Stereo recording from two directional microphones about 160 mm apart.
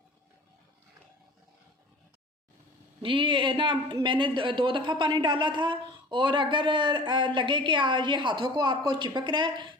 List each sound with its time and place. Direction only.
3.0 s speech: 30° right (ahead or behind)